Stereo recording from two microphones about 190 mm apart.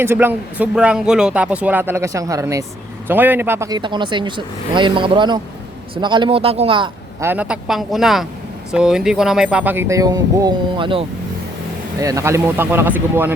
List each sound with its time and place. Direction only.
0.0 s speech: 10° right (ahead or behind); by 6.9 s 25° right (ahead or behind)
7.2 s speech: 10° right (ahead or behind)